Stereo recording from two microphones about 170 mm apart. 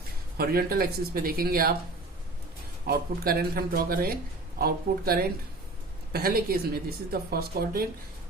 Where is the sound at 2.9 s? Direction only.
60° right (ahead or behind).